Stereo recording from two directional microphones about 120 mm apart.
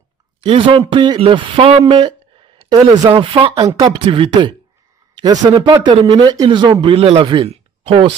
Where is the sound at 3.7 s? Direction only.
30° right (ahead or behind).